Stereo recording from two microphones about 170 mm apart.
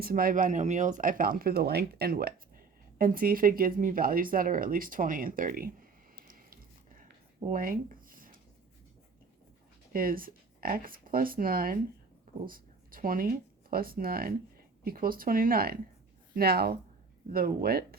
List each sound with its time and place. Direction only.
0.0 s speech: 60° right (ahead or behind)
9.9 s speech: 55° right (ahead or behind)